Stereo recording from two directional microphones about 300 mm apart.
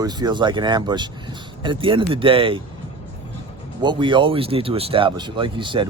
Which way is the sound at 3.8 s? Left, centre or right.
Centre.